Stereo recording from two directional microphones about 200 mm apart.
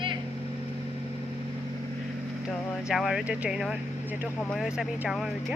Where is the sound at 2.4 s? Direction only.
Centre (ahead or behind).